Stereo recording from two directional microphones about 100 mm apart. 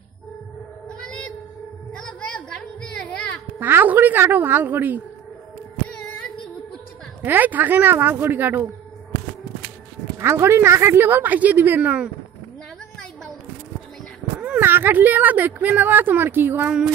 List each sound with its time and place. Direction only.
0.8 s child singing: 10° left (ahead or behind)
2.0 s a sound: 10° left (ahead or behind)
3.5 s a woman's voice: 20° right (ahead or behind)
5.9 s singing: 10° left (ahead or behind)
7.2 s a woman's voice: 20° right (ahead or behind)
10.1 s a woman's voice: 25° right (ahead or behind)
14.4 s a woman's voice: 15° right (ahead or behind)